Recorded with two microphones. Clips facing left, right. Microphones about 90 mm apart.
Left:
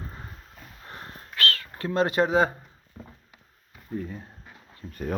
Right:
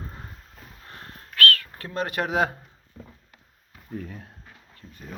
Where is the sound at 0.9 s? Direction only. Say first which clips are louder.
Left 3 dB; 20° left (ahead or behind).